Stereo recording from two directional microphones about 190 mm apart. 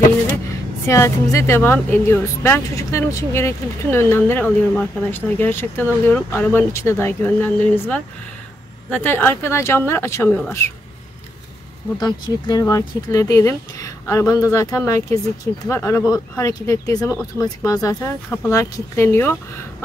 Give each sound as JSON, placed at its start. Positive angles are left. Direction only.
{"t": 0.8, "sound": "speech", "side_deg": 15}
{"t": 12.0, "sound": "speech", "side_deg": 20}